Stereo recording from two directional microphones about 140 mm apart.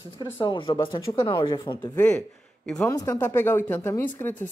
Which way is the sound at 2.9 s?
25° left (ahead or behind).